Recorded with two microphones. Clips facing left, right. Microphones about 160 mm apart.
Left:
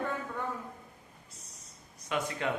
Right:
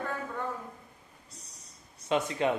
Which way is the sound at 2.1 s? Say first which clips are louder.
Right 5 dB; 25° right (ahead or behind).